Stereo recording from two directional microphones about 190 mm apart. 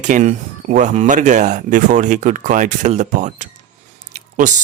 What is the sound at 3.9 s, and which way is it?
Squish, 40° right (ahead or behind).